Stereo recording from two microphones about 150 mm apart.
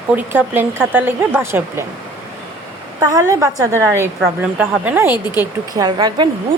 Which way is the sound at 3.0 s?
20° right (ahead or behind).